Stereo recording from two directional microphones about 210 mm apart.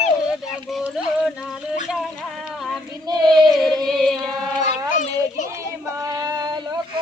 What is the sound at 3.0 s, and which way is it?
Female singing, 20° right (ahead or behind).